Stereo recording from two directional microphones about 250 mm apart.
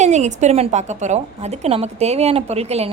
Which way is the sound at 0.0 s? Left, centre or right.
Right.